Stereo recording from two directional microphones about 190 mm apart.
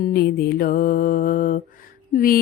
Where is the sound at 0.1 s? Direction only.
55° left (ahead or behind).